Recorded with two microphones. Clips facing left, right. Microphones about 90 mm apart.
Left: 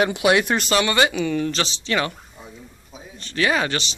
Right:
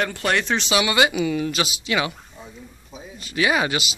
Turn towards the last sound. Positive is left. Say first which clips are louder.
# even
turn(degrees=-10)  # may be behind; listen again after turning